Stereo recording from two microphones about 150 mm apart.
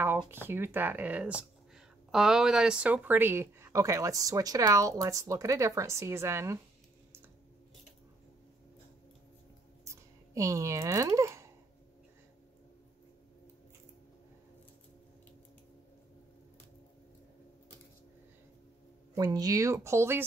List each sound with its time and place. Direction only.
0.5 s speech: 15° right (ahead or behind)
9.8 s a sound: 20° right (ahead or behind)
19.1 s speech: 25° right (ahead or behind)